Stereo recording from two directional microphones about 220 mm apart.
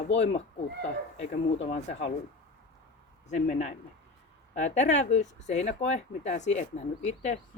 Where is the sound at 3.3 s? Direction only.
30° left (ahead or behind).